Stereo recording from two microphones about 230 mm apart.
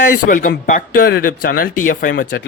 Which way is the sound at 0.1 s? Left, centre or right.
Left.